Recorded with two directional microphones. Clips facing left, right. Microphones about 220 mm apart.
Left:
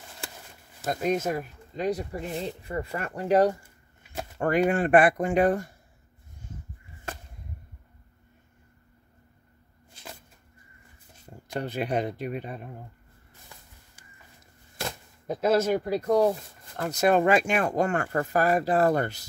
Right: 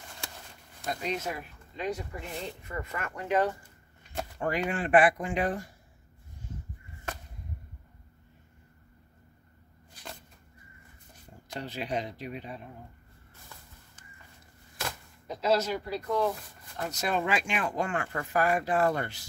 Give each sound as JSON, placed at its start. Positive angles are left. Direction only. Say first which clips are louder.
{"t": 0.8, "sound": "speech", "louder": "left 7 dB", "side_deg": 45}
{"t": 9.9, "sound": "a sound", "louder": "left 1 dB", "side_deg": 25}
{"t": 11.6, "sound": "speech", "louder": "left 5 dB", "side_deg": 55}
{"t": 15.2, "sound": "speech", "louder": "left 4 dB", "side_deg": 50}